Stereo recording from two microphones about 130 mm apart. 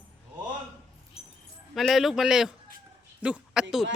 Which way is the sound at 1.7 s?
Centre (ahead or behind).